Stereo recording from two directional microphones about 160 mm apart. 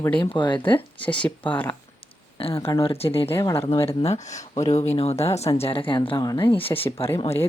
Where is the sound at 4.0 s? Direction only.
45° left (ahead or behind).